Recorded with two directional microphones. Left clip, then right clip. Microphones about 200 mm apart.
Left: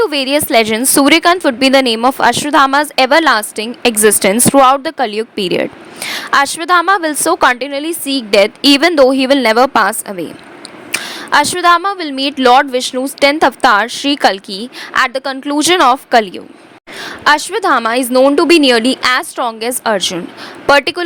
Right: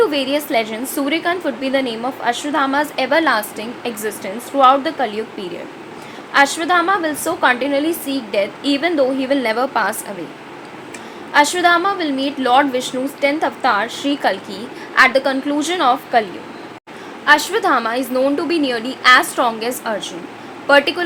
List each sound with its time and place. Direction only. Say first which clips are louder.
0.0 s a woman's voice: left 3 dB; 50° left (ahead or behind)
10.9 s a woman's voice: left 3 dB; 55° left (ahead or behind)
17.2 s a woman's voice: left 3 dB; 45° left (ahead or behind)